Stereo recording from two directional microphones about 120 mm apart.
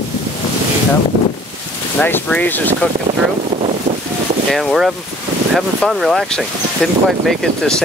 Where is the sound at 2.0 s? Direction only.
15° left (ahead or behind).